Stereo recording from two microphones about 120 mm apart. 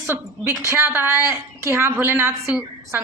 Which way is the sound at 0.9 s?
20° right (ahead or behind).